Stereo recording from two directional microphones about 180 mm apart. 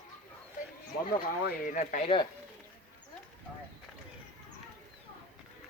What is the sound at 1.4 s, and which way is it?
Speech, 50° left (ahead or behind).